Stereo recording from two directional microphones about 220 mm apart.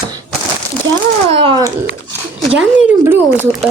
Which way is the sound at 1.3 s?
25° right (ahead or behind).